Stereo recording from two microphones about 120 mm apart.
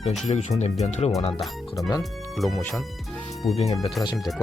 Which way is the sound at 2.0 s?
Centre (ahead or behind).